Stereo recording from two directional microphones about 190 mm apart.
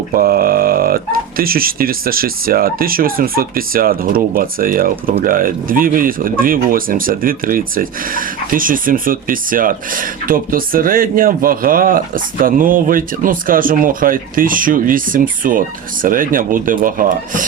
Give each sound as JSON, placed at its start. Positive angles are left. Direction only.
{"t": 0.1, "sound": "speech", "side_deg": -50}